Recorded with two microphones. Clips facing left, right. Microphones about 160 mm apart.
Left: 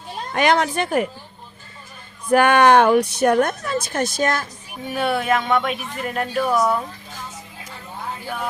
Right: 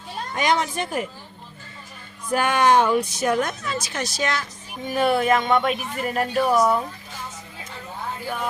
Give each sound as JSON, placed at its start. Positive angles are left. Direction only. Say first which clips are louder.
{"t": 0.3, "sound": "speech", "louder": "left 4 dB", "side_deg": 65}
{"t": 2.3, "sound": "speech", "louder": "left 5 dB", "side_deg": 65}
{"t": 4.9, "sound": "speech", "louder": "right 1 dB", "side_deg": 0}